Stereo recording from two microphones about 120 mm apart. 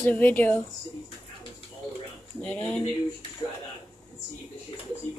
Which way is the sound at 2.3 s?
10° left (ahead or behind).